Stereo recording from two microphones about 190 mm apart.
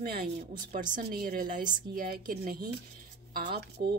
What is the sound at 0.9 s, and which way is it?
A woman's voice, 50° right (ahead or behind).